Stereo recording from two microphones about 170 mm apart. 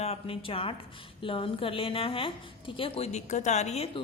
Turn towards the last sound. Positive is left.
turn(degrees=40)  # may be behind; listen again after turning